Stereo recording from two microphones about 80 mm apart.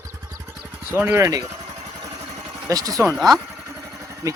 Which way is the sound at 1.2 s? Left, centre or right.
Right.